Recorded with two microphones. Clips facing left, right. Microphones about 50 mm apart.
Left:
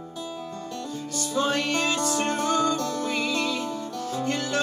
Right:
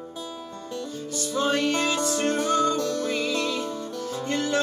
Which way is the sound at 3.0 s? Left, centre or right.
Centre.